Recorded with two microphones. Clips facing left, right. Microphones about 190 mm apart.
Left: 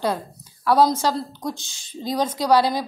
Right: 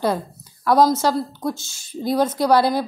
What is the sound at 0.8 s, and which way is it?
A woman's voice, 10° left (ahead or behind).